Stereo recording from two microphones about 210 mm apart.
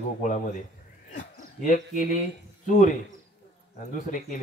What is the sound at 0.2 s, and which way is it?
A man's voice, 35° left (ahead or behind).